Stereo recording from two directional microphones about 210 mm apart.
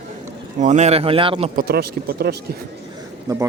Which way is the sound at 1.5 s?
45° right (ahead or behind).